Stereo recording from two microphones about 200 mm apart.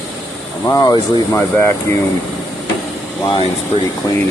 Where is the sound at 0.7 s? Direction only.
15° left (ahead or behind).